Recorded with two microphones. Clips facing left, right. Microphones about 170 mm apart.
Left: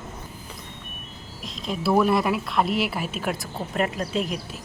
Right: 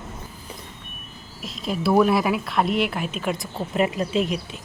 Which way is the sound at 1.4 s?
Centre (ahead or behind).